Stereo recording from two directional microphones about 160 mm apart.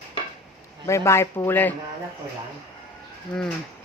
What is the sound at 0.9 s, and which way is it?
Speech, 20° left (ahead or behind).